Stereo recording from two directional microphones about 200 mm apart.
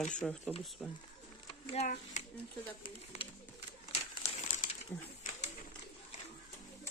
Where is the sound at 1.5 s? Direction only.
35° left (ahead or behind).